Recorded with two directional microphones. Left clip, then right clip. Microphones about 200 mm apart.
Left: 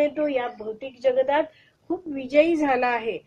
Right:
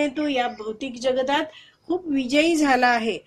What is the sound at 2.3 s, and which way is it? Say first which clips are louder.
Speech: even; 40° right (ahead or behind).